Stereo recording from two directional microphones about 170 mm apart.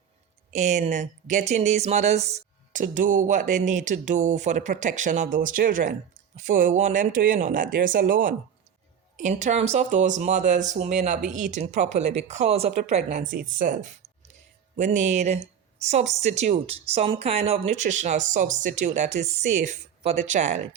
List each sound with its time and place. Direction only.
0.5 s speech: 45° right (ahead or behind)
2.8 s speech: 50° right (ahead or behind)
14.8 s speech: 45° right (ahead or behind)